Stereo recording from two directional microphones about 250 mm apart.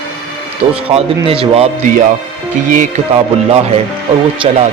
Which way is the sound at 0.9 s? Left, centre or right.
Right.